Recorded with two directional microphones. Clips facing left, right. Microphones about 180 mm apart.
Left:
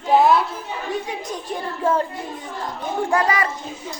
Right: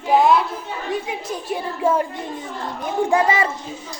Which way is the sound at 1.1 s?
10° right (ahead or behind).